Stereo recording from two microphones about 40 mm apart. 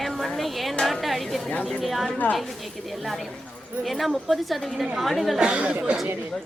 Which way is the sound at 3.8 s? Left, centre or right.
Centre.